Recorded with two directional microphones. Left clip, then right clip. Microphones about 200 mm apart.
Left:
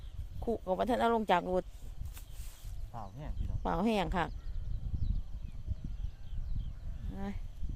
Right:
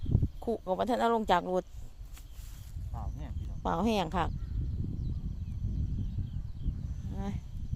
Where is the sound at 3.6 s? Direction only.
10° right (ahead or behind).